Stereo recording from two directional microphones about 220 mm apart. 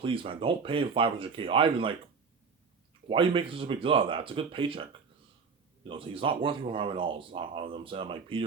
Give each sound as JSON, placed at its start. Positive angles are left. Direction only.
{"t": 0.0, "sound": "speech", "side_deg": -25}
{"t": 3.1, "sound": "speech", "side_deg": -25}